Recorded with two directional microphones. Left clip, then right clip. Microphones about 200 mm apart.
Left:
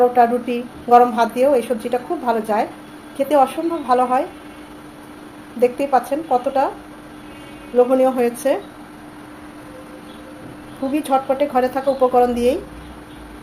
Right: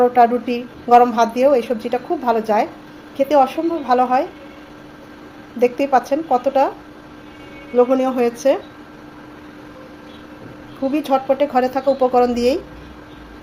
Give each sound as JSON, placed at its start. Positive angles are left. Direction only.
{"t": 0.1, "sound": "a woman's voice", "side_deg": -20}
{"t": 5.5, "sound": "a woman's voice", "side_deg": -20}
{"t": 7.8, "sound": "a woman's voice", "side_deg": -20}
{"t": 10.9, "sound": "a woman's voice", "side_deg": -15}